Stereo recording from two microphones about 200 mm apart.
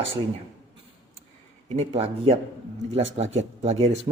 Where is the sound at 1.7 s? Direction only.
30° right (ahead or behind).